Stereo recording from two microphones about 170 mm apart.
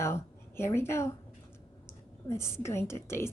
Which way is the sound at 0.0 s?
15° left (ahead or behind).